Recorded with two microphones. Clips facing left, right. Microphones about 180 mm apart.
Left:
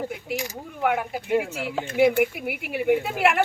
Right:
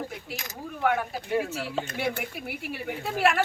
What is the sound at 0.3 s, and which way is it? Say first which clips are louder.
Speech: left 6 dB; 15° left (ahead or behind).